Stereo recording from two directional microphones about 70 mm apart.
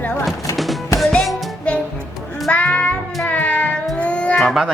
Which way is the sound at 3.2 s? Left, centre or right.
Left.